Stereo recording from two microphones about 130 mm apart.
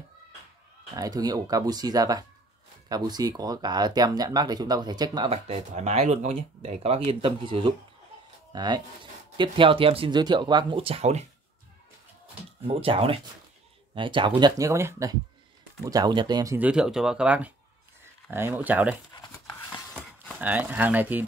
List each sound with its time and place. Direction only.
0.9 s speech: 30° right (ahead or behind)
5.3 s speech: 55° right (ahead or behind)
7.1 s speech: 40° right (ahead or behind); by 11.2 s 55° right (ahead or behind)
12.6 s speech: 45° right (ahead or behind)
14.6 s speech: 20° right (ahead or behind)
16.5 s speech: 10° right (ahead or behind)
19.1 s a sound: 30° left (ahead or behind)
20.3 s speech: 10° right (ahead or behind)